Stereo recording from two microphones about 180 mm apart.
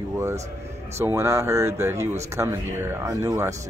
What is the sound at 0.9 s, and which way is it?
Speech, 15° right (ahead or behind).